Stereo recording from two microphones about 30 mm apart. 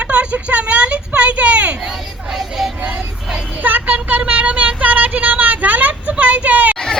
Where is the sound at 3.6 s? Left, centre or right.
Right.